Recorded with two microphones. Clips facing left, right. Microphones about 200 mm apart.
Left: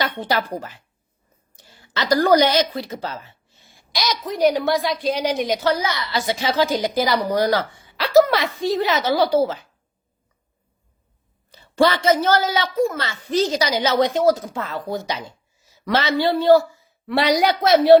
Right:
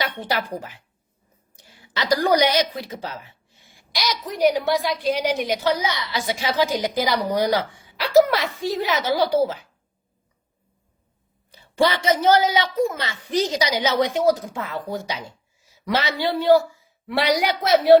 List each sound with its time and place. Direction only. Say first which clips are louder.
1.5 s a woman's voice: left 2 dB; 10° right (ahead or behind)
11.5 s a woman's voice: left 3 dB; 15° right (ahead or behind)